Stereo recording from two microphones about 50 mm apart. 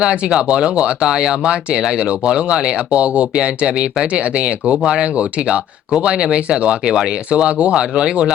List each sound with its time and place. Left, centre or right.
0.0 s speech: centre